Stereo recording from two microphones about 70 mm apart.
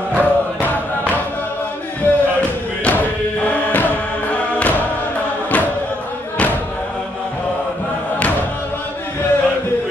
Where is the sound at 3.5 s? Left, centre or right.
Left.